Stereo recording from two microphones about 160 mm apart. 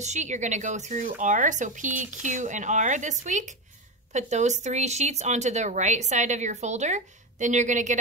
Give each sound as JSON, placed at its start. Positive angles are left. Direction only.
{"t": 0.0, "sound": "speech", "side_deg": -45}